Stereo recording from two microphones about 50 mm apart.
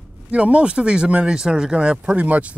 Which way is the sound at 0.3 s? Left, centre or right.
Right.